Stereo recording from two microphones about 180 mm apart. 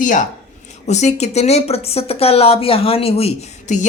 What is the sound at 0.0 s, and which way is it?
Speech, 45° left (ahead or behind).